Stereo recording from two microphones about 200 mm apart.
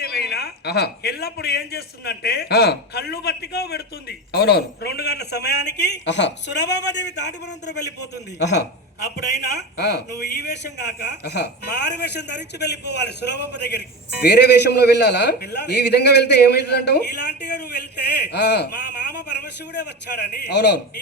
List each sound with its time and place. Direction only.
0.0 s a man's voice: 55° left (ahead or behind)
11.0 s a man's voice: 55° left (ahead or behind)